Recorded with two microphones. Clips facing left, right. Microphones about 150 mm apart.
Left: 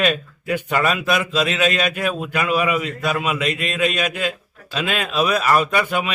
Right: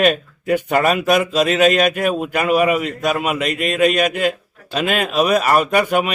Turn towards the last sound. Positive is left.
turn(degrees=-45)  # may be behind; listen again after turning